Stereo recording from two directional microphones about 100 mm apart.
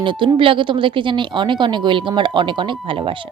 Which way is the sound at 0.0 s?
55° right (ahead or behind).